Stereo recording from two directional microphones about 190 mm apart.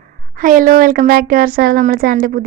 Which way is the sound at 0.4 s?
45° right (ahead or behind).